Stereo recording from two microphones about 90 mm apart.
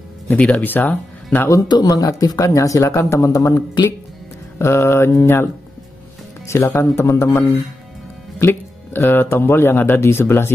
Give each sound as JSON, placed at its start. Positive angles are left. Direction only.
{"t": 0.3, "sound": "speech", "side_deg": 15}
{"t": 1.7, "sound": "speech", "side_deg": 45}